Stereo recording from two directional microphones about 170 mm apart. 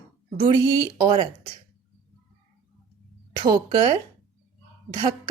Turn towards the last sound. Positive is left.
turn(degrees=-25)  # may be behind; listen again after turning